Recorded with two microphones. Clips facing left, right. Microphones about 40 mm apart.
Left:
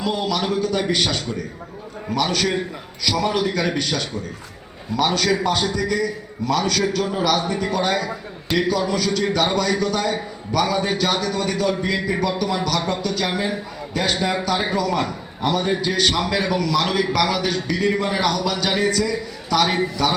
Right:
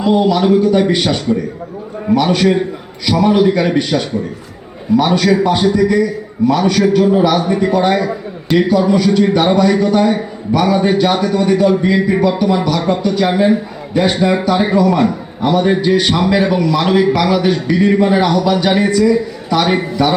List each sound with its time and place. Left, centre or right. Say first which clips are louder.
0.0 s a man's voice: right 10 dB; centre
2.0 s a man's voice: right 9 dB; right